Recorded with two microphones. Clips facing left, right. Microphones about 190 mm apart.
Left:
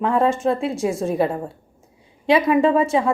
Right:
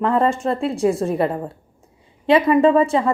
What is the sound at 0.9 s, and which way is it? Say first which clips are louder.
A woman's voice: right 1 dB; centre (ahead or behind).